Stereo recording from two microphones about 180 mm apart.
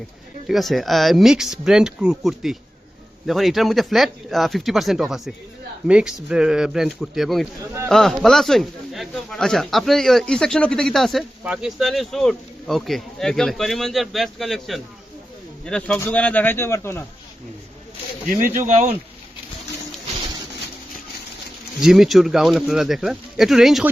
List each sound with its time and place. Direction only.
0.4 s a man's voice: centre (ahead or behind)
18.5 s speech: 45° right (ahead or behind)
21.8 s speech: centre (ahead or behind)